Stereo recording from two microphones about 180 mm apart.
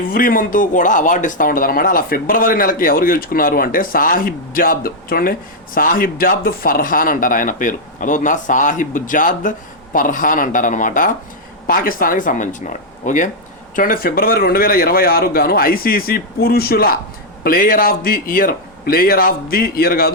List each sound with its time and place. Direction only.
0.1 s speech: 50° left (ahead or behind)